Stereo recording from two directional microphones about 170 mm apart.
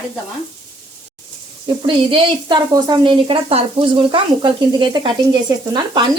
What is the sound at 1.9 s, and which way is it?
Speech, 30° right (ahead or behind).